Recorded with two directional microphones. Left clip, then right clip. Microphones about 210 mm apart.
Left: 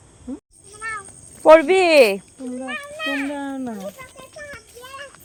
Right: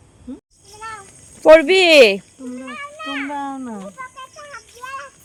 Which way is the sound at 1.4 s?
25° right (ahead or behind).